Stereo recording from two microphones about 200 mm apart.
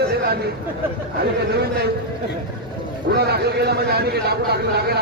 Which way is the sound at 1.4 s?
55° right (ahead or behind).